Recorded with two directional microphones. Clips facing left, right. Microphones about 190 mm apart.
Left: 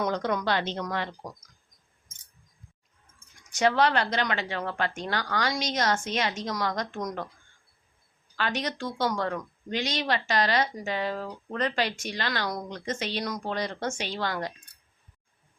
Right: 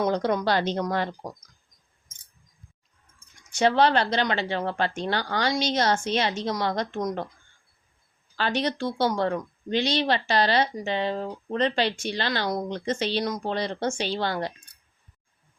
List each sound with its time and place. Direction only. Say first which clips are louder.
0.0 s speech: right 4 dB; 30° right (ahead or behind)
3.5 s speech: right 3 dB; 30° right (ahead or behind)
8.4 s speech: right 4 dB; 30° right (ahead or behind)